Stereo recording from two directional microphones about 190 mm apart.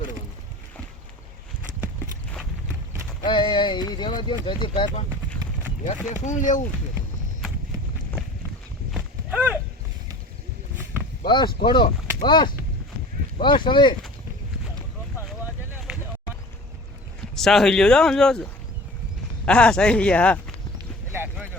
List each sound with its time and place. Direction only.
3.2 s speech: 25° left (ahead or behind)
6.2 s speech: 40° left (ahead or behind)
8.9 s clip-clop: 5° right (ahead or behind)
11.3 s speech: 25° left (ahead or behind)
15.9 s a sound: 5° right (ahead or behind)
17.3 s speech: centre (ahead or behind)
19.5 s speech: 5° left (ahead or behind)
21.1 s boat: 10° right (ahead or behind)